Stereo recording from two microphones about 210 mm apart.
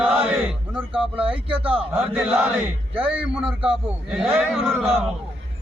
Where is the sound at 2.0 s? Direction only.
5° right (ahead or behind).